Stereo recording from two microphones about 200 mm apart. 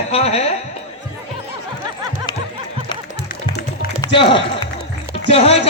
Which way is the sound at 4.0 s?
25° left (ahead or behind).